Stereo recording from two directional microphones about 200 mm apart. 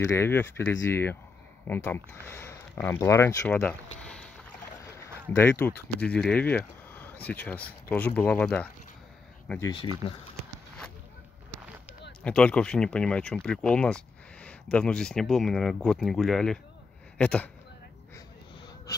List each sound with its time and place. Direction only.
0.0 s speech: 10° left (ahead or behind)
4.0 s boat: 5° left (ahead or behind)
5.3 s speech: 10° left (ahead or behind)
9.6 s speech: 20° left (ahead or behind)
12.2 s speech: 5° left (ahead or behind)